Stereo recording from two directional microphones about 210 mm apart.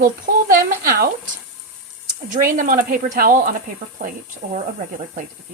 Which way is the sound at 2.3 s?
40° right (ahead or behind).